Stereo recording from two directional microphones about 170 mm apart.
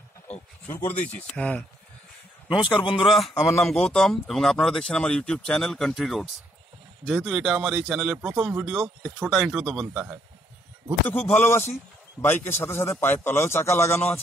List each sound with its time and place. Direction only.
0.3 s a sound: 10° left (ahead or behind)
1.0 s a man's voice: 10° left (ahead or behind)
2.7 s speech: 30° left (ahead or behind)
3.6 s speech: centre (ahead or behind)
11.1 s a man's voice: 10° left (ahead or behind)